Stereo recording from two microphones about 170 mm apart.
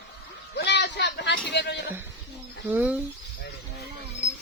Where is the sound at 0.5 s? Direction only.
85° left.